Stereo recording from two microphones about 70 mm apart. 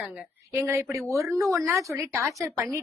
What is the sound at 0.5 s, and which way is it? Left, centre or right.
A woman's voice, right.